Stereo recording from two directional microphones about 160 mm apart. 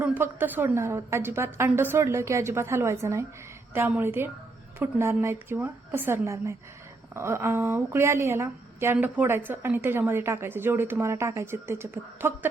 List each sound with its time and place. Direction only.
0.0 s a woman's voice: 10° right (ahead or behind)